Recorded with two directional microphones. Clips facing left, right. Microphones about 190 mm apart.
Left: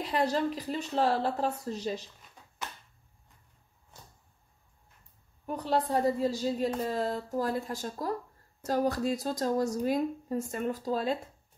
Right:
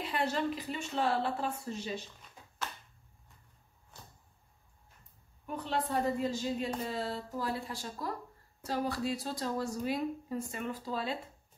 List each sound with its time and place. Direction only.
0.0 s a woman's voice: 40° left (ahead or behind)
5.5 s a woman's voice: 40° left (ahead or behind)